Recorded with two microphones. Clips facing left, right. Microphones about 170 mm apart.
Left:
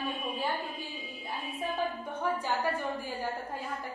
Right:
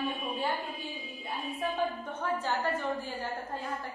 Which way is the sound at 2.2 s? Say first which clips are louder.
Even; 10° left (ahead or behind).